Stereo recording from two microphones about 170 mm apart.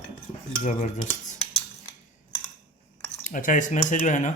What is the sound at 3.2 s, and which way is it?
Speech, 50° left (ahead or behind).